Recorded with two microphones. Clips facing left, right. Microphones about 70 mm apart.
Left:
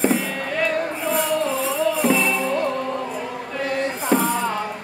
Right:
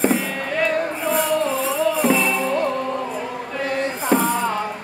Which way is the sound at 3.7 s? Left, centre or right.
Right.